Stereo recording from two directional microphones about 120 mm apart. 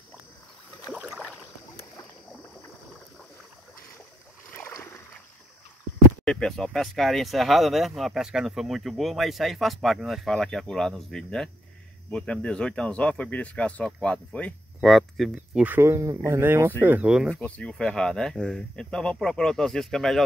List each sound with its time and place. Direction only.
0.9 s rowboat: 5° right (ahead or behind)
4.5 s boat: 15° left (ahead or behind)
6.2 s speech: 5° left (ahead or behind)
14.8 s speech: centre (ahead or behind)
15.6 s speech: 20° right (ahead or behind)
17.3 s speech: 10° left (ahead or behind)